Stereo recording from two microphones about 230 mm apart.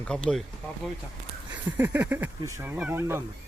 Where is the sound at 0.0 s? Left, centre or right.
Centre.